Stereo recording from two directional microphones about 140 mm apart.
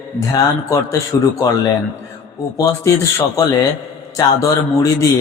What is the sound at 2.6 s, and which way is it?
A man's voice, 20° left (ahead or behind).